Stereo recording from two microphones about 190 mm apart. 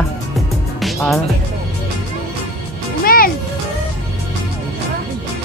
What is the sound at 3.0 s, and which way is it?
Music, 50° left (ahead or behind).